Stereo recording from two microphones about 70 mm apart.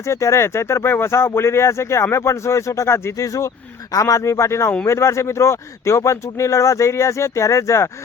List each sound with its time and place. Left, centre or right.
0.0 s speech: left
3.2 s speech: left